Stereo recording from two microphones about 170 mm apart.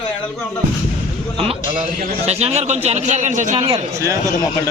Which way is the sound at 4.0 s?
20° right (ahead or behind).